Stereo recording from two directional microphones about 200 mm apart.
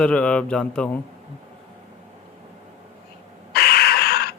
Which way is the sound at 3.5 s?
50° left (ahead or behind).